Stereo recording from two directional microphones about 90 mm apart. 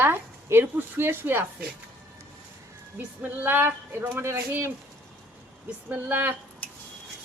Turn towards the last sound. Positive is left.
turn(degrees=15)  # may be behind; listen again after turning